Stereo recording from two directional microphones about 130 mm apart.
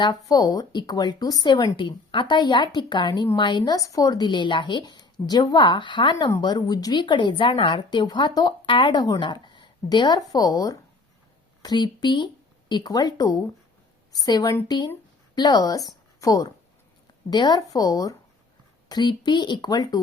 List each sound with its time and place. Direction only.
0.0 s speech: 30° left (ahead or behind)
15.9 s a sound: 30° left (ahead or behind)
17.2 s speech: 35° left (ahead or behind)